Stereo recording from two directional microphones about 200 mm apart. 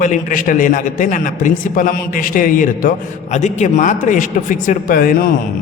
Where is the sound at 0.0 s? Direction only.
40° left (ahead or behind).